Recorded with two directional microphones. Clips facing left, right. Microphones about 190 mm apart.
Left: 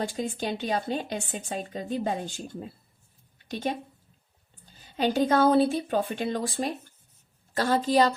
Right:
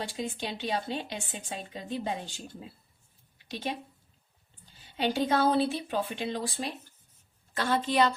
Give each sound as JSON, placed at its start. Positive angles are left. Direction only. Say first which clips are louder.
{"t": 0.2, "sound": "speech", "louder": "left 4 dB", "side_deg": 45}
{"t": 4.8, "sound": "a woman's voice", "louder": "left 4 dB", "side_deg": 45}